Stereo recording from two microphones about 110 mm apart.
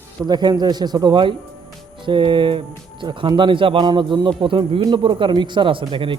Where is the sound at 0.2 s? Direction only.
40° right (ahead or behind).